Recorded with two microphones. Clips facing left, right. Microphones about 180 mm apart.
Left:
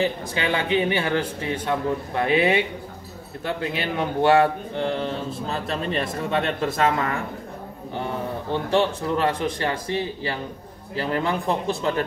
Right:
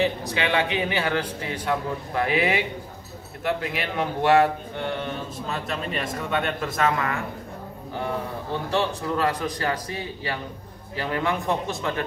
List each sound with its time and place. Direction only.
0.0 s a man's voice: 30° left (ahead or behind)
9.1 s a man's voice: 25° left (ahead or behind)